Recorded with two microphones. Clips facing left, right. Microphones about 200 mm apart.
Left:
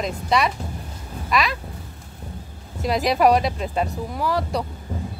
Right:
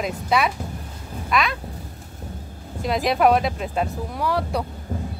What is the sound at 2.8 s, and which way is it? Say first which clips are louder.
Speech: left 1 dB; centre (ahead or behind).